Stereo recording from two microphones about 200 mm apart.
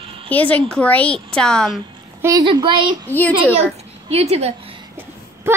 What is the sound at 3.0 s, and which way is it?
Speech, 10° left (ahead or behind).